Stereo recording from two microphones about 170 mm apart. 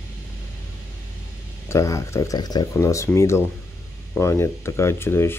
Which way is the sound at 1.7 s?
15° left (ahead or behind).